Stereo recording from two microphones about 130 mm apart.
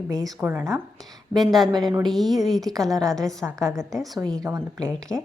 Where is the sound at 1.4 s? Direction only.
Centre (ahead or behind).